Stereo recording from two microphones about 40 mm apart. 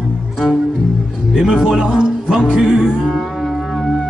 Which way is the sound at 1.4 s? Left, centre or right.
Centre.